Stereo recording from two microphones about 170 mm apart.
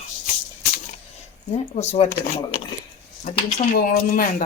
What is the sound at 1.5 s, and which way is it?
Speech, 40° left (ahead or behind).